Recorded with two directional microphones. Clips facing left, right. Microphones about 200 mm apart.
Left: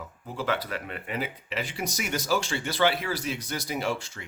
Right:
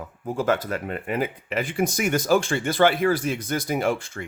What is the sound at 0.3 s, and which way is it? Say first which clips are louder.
Speech: right 7 dB; 45° right (ahead or behind).